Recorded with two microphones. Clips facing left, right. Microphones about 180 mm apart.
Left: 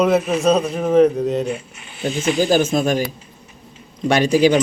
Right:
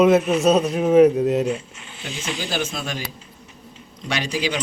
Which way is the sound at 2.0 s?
50° left (ahead or behind).